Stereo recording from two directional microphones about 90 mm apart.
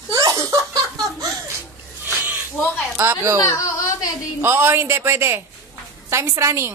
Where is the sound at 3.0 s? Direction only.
30° right (ahead or behind).